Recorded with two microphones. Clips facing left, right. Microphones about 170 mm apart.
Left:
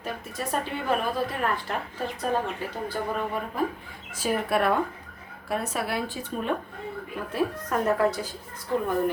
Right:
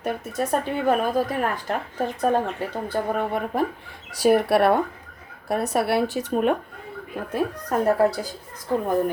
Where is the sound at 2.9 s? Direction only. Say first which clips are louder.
Right 6 dB; 60° right (ahead or behind).